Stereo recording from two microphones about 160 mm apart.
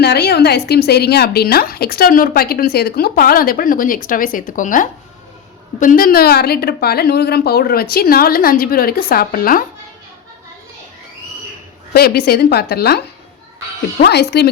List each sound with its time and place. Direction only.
0.0 s a woman's voice: 90° left; by 9.6 s 60° left (ahead or behind)
11.9 s a woman's voice: 75° left (ahead or behind)
14.0 s speech: 90° left